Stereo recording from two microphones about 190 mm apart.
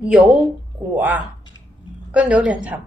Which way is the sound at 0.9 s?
5° right (ahead or behind).